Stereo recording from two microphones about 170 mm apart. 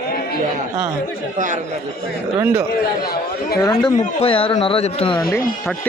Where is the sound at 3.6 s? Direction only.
20° left (ahead or behind).